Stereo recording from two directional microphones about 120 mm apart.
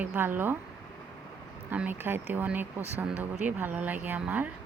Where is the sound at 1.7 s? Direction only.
15° right (ahead or behind).